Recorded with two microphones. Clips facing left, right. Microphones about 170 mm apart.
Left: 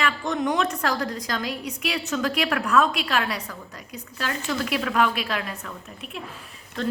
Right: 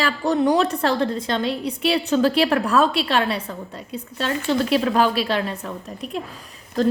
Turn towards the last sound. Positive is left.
turn(degrees=-40)  # may be behind; listen again after turning